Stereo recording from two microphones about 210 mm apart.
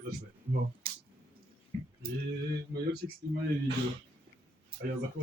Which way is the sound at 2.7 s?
45° right (ahead or behind).